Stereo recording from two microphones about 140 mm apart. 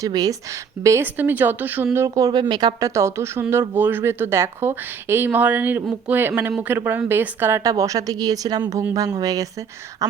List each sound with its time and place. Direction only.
0.0 s speech: 25° right (ahead or behind)
0.9 s speech: 15° right (ahead or behind)